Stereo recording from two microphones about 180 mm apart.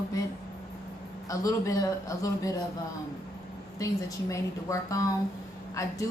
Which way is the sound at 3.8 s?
15° left (ahead or behind).